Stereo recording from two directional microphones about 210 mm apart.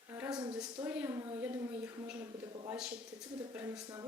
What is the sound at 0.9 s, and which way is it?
Speech, 10° right (ahead or behind).